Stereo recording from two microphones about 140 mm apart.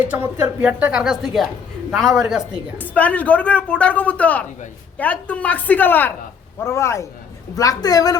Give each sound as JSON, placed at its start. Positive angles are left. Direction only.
{"t": 0.0, "sound": "a woman's voice", "side_deg": -10}
{"t": 2.7, "sound": "a woman's voice", "side_deg": 10}